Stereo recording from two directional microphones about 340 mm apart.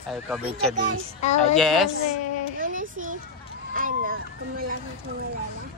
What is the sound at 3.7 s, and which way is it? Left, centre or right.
Speech, right.